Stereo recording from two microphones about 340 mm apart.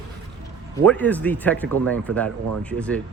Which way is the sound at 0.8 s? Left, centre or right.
Centre.